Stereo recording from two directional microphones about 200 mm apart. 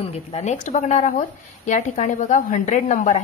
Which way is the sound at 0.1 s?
35° left (ahead or behind).